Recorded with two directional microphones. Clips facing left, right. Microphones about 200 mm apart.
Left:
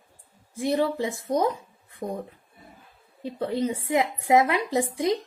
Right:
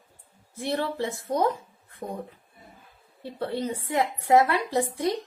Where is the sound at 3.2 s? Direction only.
15° left (ahead or behind).